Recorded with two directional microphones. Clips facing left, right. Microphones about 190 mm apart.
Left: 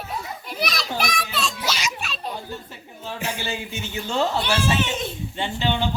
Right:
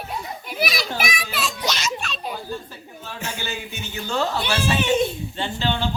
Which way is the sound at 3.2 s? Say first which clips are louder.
Left 1 dB; 30° left (ahead or behind).